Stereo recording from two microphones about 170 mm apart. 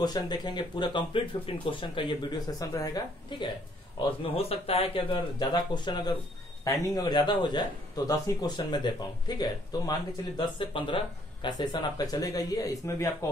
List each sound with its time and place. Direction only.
0.0 s a man's voice: 25° left (ahead or behind)
4.2 s a man's voice: 35° left (ahead or behind); by 13.3 s 15° left (ahead or behind)